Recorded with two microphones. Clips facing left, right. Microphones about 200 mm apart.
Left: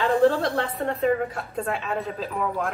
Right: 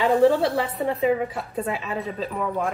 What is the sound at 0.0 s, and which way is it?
A woman's voice, 5° right (ahead or behind).